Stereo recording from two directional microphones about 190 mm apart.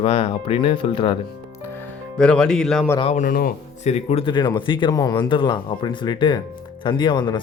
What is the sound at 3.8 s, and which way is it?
Speech, 35° left (ahead or behind).